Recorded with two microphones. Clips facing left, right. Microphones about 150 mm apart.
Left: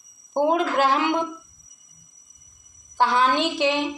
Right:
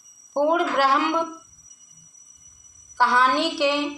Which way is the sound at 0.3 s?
20° left (ahead or behind).